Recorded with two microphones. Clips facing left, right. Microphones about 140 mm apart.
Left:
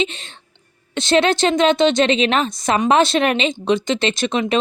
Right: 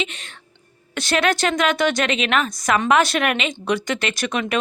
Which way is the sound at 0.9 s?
25° left (ahead or behind).